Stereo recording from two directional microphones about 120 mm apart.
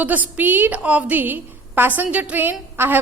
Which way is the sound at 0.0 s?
15° right (ahead or behind).